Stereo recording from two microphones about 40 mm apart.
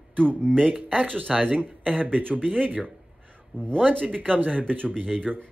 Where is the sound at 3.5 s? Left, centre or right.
Left.